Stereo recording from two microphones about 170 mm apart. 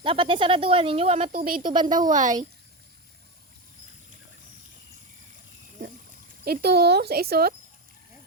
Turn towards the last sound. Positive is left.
turn(degrees=-65)  # may be behind; listen again after turning